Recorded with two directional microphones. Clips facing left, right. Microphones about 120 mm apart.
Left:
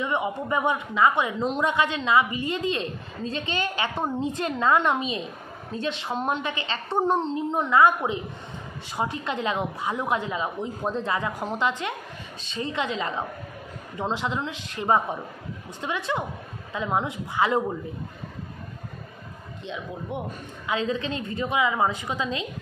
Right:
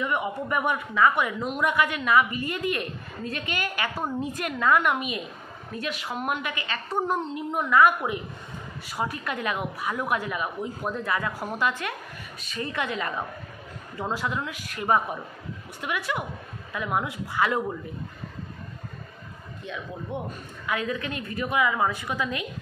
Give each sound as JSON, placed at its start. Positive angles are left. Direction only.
{"t": 0.0, "sound": "a woman's voice", "side_deg": 20}
{"t": 19.6, "sound": "a woman's voice", "side_deg": 20}